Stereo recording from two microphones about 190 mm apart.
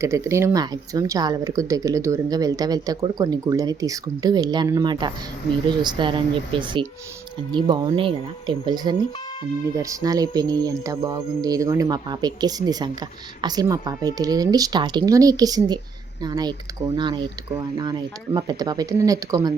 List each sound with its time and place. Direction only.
0.0 s speech: 15° right (ahead or behind)
18.3 s speech: 20° right (ahead or behind)